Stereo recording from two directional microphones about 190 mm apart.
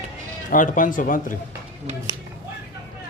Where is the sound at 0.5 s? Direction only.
45° left (ahead or behind).